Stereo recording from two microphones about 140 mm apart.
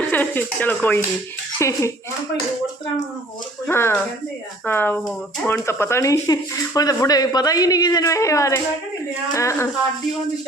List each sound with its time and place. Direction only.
0.1 s speech: 15° left (ahead or behind)
3.7 s speech: 20° left (ahead or behind)